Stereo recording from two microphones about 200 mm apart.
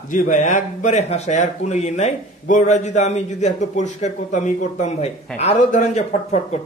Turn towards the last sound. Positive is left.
turn(degrees=35)  # may be behind; listen again after turning